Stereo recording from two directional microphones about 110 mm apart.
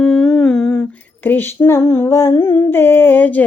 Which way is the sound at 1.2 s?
15° left (ahead or behind).